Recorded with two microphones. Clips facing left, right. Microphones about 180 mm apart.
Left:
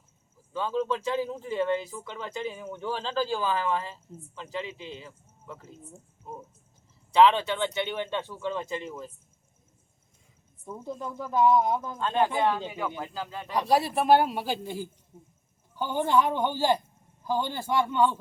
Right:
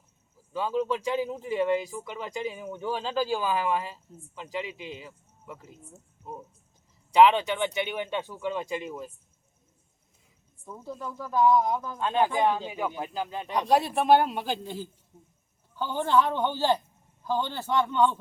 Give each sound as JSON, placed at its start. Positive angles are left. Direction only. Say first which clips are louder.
{"t": 0.5, "sound": "speech", "louder": "right 1 dB", "side_deg": -15}
{"t": 7.1, "sound": "speech", "louder": "right 1 dB", "side_deg": -15}
{"t": 10.7, "sound": "speech", "louder": "left 2 dB", "side_deg": 20}
{"t": 11.9, "sound": "speech", "louder": "right 2 dB", "side_deg": -15}
{"t": 13.6, "sound": "a man's voice", "louder": "even", "side_deg": 0}